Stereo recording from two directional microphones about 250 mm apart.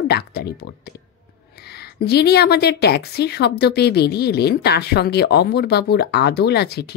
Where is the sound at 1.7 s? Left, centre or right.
Left.